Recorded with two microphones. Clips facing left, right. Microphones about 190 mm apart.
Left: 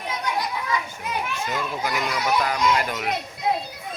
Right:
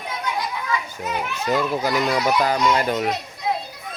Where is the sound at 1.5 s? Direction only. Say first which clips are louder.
Right 6 dB; 30° right (ahead or behind).